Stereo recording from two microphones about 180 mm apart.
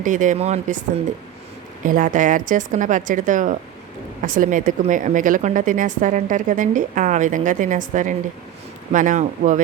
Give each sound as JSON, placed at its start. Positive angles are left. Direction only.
{"t": 0.0, "sound": "a woman's voice", "side_deg": -45}
{"t": 1.8, "sound": "a woman's voice", "side_deg": -50}